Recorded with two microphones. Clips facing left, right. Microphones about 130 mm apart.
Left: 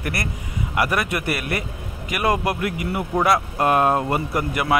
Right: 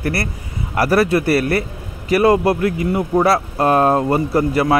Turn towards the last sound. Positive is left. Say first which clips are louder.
# right 6 dB
turn(degrees=-30)  # may be behind; listen again after turning